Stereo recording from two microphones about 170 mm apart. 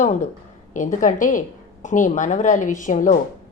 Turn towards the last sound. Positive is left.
turn(degrees=50)  # may be behind; listen again after turning